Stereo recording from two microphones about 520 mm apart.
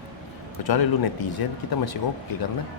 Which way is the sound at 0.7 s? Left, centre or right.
Left.